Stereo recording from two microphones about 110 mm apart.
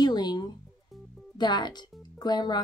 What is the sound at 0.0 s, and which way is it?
Music, 40° left (ahead or behind).